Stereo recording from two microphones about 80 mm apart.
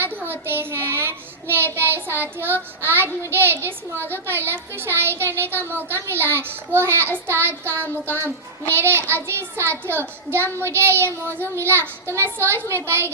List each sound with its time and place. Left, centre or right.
0.0 s a child's voice: right